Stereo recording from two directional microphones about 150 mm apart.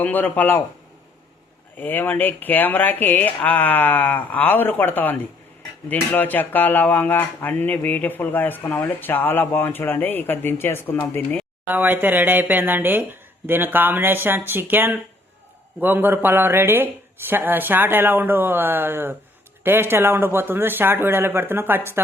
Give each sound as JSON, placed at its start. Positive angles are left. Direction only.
{"t": 0.0, "sound": "speech", "side_deg": 10}
{"t": 1.8, "sound": "speech", "side_deg": 10}
{"t": 11.7, "sound": "speech", "side_deg": -10}